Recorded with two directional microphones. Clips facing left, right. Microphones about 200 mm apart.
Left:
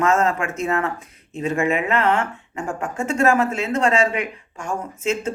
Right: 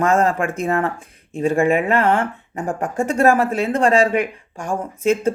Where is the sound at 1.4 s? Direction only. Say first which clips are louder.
Right 5 dB; 35° right (ahead or behind).